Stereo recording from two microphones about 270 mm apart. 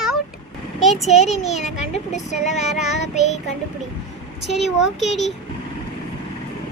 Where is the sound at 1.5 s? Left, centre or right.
Left.